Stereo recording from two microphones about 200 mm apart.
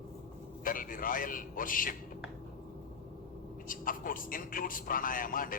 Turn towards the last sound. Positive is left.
turn(degrees=45)  # may be behind; listen again after turning